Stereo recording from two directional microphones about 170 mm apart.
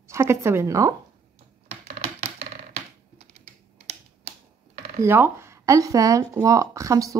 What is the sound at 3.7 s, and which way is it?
Typing, 40° right (ahead or behind).